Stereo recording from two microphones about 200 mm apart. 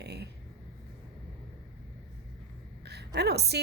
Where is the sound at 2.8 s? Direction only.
55° right (ahead or behind).